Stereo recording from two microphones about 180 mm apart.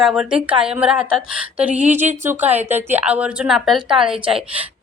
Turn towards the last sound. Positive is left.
turn(degrees=-5)  # may be behind; listen again after turning